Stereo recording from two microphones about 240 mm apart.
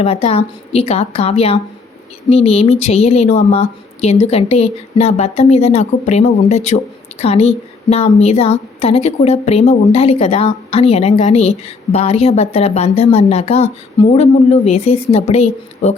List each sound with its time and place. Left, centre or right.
0.0 s a woman's voice: left